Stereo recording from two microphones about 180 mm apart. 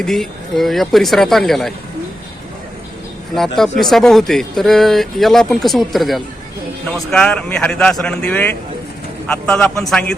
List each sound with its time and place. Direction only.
0.0 s speech: centre (ahead or behind)
3.6 s speech: centre (ahead or behind)